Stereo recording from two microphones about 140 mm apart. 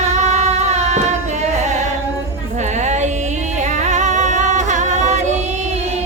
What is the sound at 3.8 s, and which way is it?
Music, 60° right (ahead or behind).